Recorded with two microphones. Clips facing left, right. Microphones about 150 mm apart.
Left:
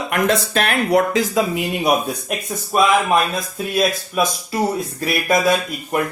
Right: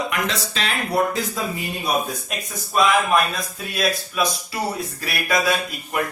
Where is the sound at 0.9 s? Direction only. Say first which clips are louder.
Left 5 dB; 90° left; by 2.3 s 65° left (ahead or behind).